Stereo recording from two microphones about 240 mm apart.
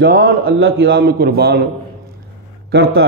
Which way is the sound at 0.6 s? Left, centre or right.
Right.